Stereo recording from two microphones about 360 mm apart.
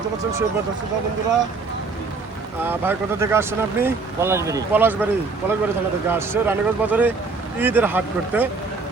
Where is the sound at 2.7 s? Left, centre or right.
Centre.